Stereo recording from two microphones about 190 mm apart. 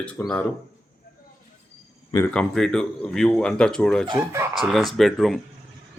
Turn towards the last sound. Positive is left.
turn(degrees=0)  # may be behind; listen again after turning